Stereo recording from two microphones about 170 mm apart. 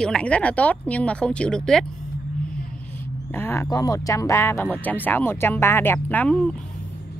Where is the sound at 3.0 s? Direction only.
10° left (ahead or behind).